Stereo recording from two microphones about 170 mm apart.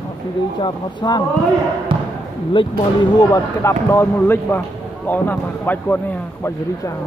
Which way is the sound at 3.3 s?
15° left (ahead or behind).